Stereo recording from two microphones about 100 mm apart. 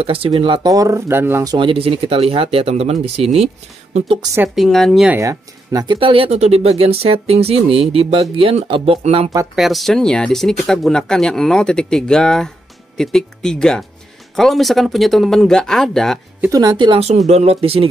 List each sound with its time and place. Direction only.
0.0 s speech: 70° right (ahead or behind)
0.7 s speech: 35° right (ahead or behind)
1.6 s speech: 65° right (ahead or behind); by 3.4 s 90° right
4.6 s speech: centre (ahead or behind)
5.1 s speech: 30° right (ahead or behind)
5.9 s speech: 60° right (ahead or behind)
9.6 s speech: centre (ahead or behind)
16.5 s speech: 45° right (ahead or behind)
17.3 s speech: 90° right; by 17.8 s 75° right (ahead or behind)